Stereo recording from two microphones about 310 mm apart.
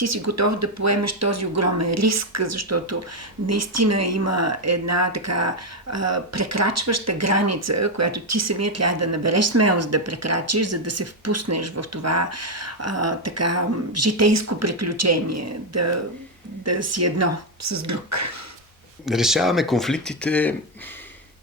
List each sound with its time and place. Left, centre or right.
0.0 s speech: right
19.0 s speech: centre